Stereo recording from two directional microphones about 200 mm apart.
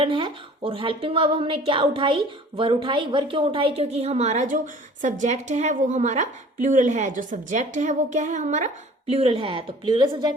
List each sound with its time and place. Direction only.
0.0 s a woman's voice: 25° right (ahead or behind)